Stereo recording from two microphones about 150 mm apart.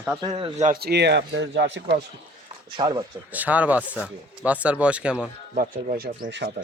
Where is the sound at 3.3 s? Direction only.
10° right (ahead or behind).